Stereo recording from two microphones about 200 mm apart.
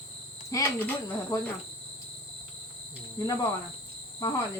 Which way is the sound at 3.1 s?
20° left (ahead or behind).